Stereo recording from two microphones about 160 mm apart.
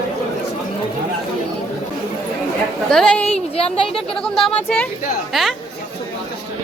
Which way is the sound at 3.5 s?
35° left (ahead or behind).